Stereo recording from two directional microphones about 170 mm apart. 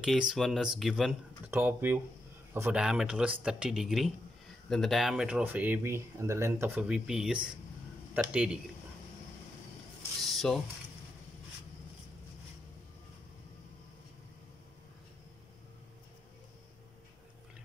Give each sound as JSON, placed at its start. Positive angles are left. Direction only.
{"t": 0.0, "sound": "speech", "side_deg": 0}
{"t": 1.5, "sound": "speech", "side_deg": -10}
{"t": 10.2, "sound": "a sound", "side_deg": 0}